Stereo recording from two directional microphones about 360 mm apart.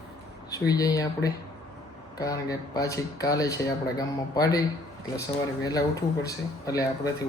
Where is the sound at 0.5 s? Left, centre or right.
Centre.